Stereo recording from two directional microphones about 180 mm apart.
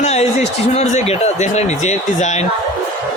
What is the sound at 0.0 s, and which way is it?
Speech, 40° left (ahead or behind).